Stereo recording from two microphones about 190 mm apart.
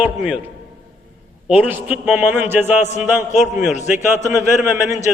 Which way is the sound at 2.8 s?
35° left (ahead or behind).